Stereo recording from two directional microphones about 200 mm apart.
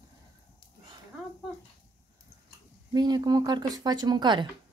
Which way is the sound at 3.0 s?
20° right (ahead or behind).